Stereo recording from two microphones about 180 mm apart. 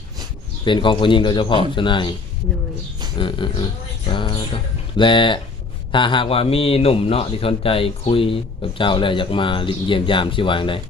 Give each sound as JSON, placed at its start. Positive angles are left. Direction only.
{"t": 0.6, "sound": "speech", "side_deg": 25}
{"t": 3.2, "sound": "speech", "side_deg": 25}
{"t": 4.1, "sound": "mantra", "side_deg": 25}
{"t": 5.9, "sound": "a man's voice", "side_deg": 25}